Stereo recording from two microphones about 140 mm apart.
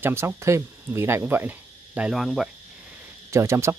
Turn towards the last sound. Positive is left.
turn(degrees=-20)  # may be behind; listen again after turning